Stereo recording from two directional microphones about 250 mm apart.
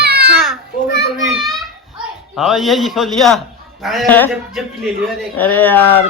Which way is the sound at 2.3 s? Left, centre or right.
Centre.